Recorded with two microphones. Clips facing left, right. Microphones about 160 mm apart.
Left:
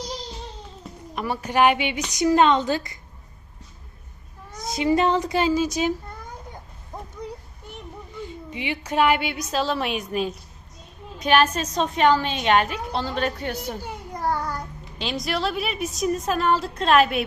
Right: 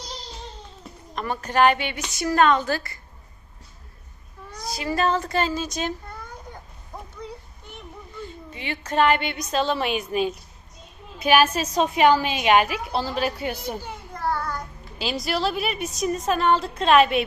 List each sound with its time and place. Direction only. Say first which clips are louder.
1.1 s a woman's voice: even; 10° left (ahead or behind)
4.5 s a woman's voice: left 5 dB; 20° left (ahead or behind)
7.7 s a woman's voice: left 2 dB; 15° left (ahead or behind); by 13.6 s 10° right (ahead or behind)
13.8 s child singing: left 4 dB; 15° left (ahead or behind)
14.9 s a woman's voice: right 1 dB; 5° right (ahead or behind)